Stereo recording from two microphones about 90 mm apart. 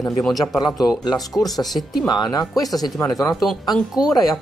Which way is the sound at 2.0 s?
50° left (ahead or behind).